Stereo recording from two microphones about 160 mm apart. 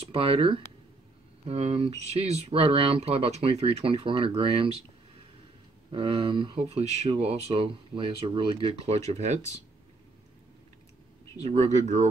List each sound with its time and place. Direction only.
0.0 s speech: 35° right (ahead or behind)
5.9 s speech: 30° right (ahead or behind)
11.4 s speech: 45° right (ahead or behind)